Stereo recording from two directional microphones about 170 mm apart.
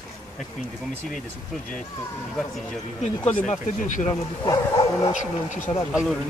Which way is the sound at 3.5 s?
45° left (ahead or behind).